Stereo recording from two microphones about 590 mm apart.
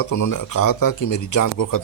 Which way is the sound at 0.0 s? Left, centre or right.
Left.